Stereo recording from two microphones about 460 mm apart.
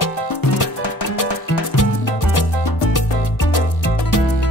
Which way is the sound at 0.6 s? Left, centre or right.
Left.